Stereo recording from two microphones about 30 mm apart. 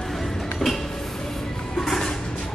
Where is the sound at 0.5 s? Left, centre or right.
Centre.